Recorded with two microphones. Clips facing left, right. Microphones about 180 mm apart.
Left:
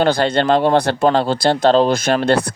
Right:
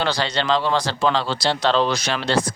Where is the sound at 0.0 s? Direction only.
55° left (ahead or behind).